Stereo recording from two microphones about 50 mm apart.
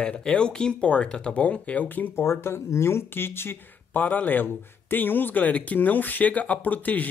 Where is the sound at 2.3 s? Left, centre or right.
Left.